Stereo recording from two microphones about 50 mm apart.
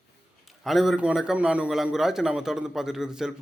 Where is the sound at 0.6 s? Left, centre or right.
Centre.